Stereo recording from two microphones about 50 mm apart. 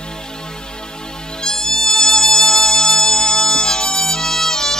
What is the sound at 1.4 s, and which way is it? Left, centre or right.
Music, centre.